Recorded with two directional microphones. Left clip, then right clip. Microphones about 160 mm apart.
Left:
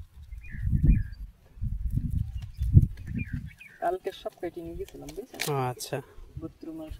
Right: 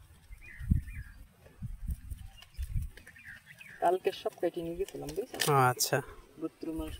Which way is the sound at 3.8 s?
15° left (ahead or behind).